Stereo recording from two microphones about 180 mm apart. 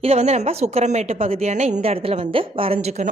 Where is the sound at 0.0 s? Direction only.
35° right (ahead or behind).